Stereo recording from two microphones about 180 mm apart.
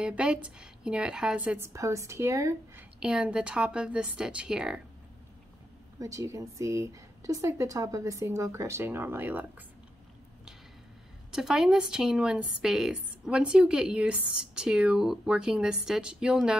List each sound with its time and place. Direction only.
0.0 s speech: 5° right (ahead or behind)
5.9 s speech: 15° right (ahead or behind)
11.3 s speech: 5° right (ahead or behind)